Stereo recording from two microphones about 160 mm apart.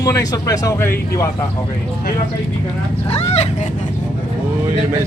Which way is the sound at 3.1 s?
40° left (ahead or behind).